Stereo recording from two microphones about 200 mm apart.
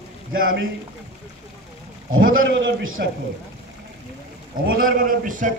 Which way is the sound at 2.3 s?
80° right.